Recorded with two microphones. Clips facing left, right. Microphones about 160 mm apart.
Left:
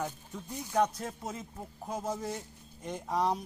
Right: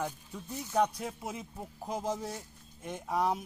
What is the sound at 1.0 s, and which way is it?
Speech, 10° right (ahead or behind).